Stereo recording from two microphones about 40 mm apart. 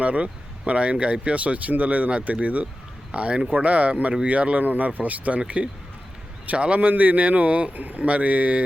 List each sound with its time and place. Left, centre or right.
0.0 s speech: right
3.1 s speech: right
6.4 s speech: right